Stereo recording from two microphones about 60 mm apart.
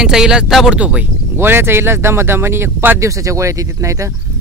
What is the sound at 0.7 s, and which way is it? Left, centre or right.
Speech, right.